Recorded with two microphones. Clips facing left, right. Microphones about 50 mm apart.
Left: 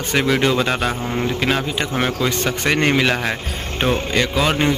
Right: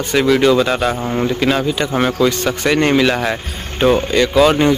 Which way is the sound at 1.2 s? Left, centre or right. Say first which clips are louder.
Right 4 dB; centre.